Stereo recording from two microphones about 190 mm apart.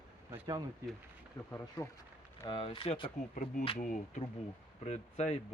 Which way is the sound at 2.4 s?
25° left (ahead or behind).